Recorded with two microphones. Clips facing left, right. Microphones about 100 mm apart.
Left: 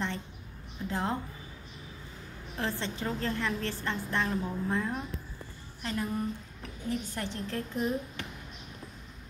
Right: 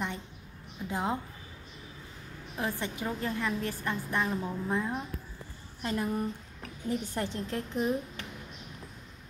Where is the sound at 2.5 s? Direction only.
15° right (ahead or behind).